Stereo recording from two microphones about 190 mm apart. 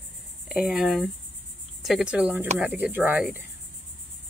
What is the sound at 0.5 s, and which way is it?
Speech, centre (ahead or behind).